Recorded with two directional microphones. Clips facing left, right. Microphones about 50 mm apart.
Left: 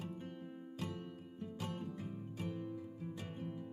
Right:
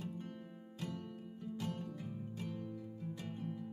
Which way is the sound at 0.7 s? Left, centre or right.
Centre.